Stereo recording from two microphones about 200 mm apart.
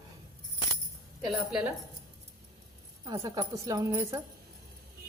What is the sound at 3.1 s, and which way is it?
A woman's voice, 15° right (ahead or behind).